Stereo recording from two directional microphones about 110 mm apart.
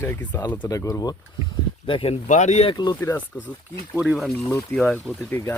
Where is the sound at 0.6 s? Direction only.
30° left (ahead or behind).